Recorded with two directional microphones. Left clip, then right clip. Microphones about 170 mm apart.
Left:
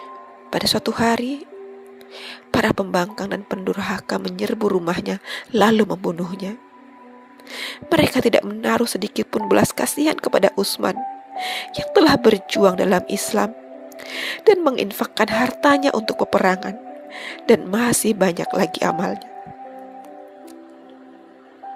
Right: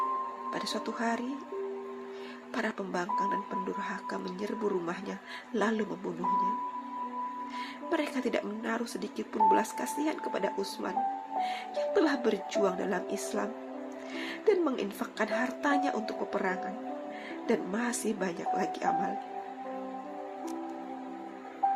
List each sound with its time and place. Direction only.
0.5 s speech: 55° left (ahead or behind)
2.5 s speech: 55° left (ahead or behind)
7.5 s speech: 55° left (ahead or behind)